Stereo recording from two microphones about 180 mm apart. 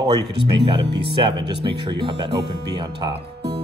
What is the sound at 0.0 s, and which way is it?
Speech, 25° right (ahead or behind).